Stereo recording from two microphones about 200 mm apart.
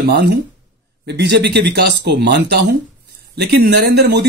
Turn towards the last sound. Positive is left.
turn(degrees=-55)  # may be behind; listen again after turning